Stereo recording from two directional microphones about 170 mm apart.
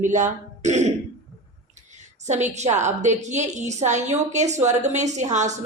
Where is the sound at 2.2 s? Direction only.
45° right (ahead or behind).